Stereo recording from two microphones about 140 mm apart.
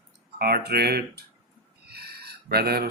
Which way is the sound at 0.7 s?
90° right.